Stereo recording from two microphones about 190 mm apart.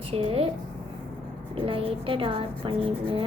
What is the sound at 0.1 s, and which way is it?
Speech, 30° right (ahead or behind).